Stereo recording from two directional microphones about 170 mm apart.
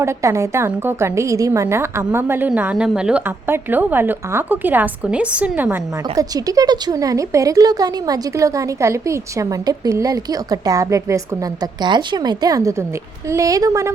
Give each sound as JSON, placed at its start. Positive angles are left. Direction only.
{"t": 0.0, "sound": "a woman's voice", "side_deg": -15}
{"t": 6.1, "sound": "a woman's voice", "side_deg": -20}